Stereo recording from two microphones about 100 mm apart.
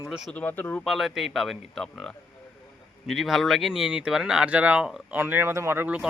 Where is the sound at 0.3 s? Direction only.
15° left (ahead or behind).